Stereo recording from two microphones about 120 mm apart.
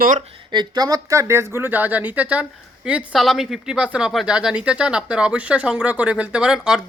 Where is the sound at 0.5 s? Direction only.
35° right (ahead or behind).